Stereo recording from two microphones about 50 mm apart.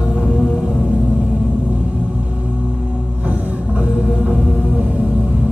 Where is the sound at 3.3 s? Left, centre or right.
Right.